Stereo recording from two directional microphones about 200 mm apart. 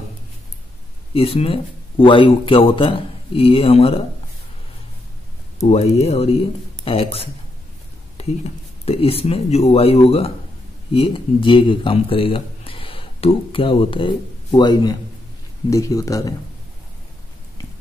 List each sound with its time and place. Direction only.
1.1 s a man's voice: 30° left (ahead or behind)
5.7 s a man's voice: 30° left (ahead or behind); by 16.3 s 15° left (ahead or behind)